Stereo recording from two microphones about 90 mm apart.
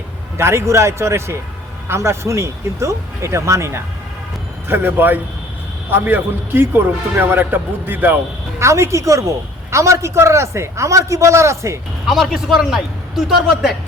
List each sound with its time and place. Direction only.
0.3 s a man's voice: 30° right (ahead or behind)
8.6 s a man's voice: 35° right (ahead or behind)
12.0 s a man's voice: centre (ahead or behind)